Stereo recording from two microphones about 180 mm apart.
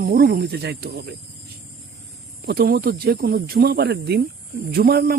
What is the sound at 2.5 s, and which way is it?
Speech, 60° right (ahead or behind).